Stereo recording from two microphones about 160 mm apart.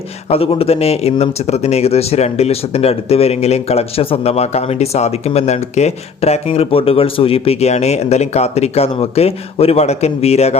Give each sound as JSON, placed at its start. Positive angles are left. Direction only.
{"t": 0.3, "sound": "speech", "side_deg": 35}